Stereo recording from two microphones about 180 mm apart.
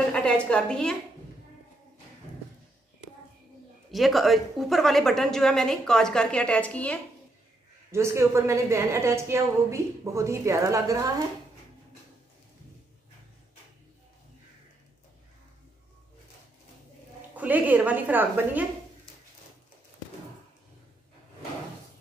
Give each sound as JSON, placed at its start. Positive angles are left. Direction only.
{"t": 0.1, "sound": "a woman's voice", "side_deg": 5}
{"t": 3.9, "sound": "a woman's voice", "side_deg": 0}
{"t": 7.9, "sound": "a woman's voice", "side_deg": -15}
{"t": 17.4, "sound": "a woman's voice", "side_deg": -10}